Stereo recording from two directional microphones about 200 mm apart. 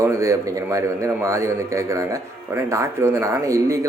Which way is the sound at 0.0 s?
15° right (ahead or behind).